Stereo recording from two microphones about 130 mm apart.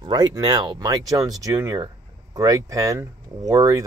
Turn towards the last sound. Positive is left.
turn(degrees=-25)  # may be behind; listen again after turning